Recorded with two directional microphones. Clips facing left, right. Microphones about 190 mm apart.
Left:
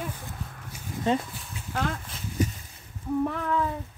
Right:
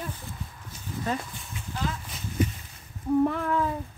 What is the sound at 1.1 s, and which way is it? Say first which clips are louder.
Speech: left 6 dB; 25° left (ahead or behind).